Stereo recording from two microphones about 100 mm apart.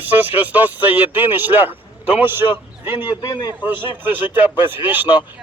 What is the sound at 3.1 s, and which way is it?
Speech, 40° left (ahead or behind).